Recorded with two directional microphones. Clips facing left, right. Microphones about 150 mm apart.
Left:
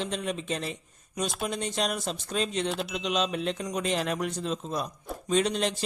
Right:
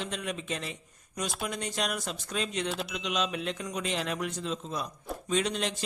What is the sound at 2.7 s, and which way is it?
Speech, centre (ahead or behind).